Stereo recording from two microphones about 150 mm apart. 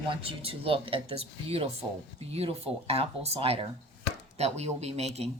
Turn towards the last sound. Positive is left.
turn(degrees=-45)  # may be behind; listen again after turning